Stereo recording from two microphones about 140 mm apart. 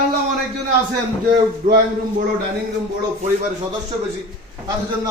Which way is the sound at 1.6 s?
65° right (ahead or behind).